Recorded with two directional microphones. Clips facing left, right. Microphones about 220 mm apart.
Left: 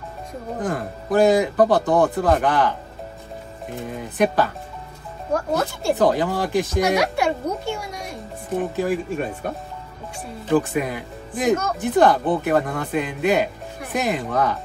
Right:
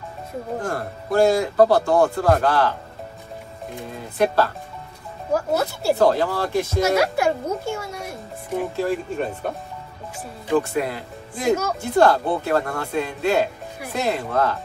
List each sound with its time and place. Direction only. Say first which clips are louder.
0.6 s speech: left 5 dB; 20° left (ahead or behind)
5.3 s speech: right 1 dB; 5° right (ahead or behind)
5.9 s speech: even; 15° left (ahead or behind)
6.8 s speech: right 2 dB; centre (ahead or behind)
8.7 s speech: left 1 dB; 15° left (ahead or behind)
10.5 s speech: left 1 dB; 15° left (ahead or behind)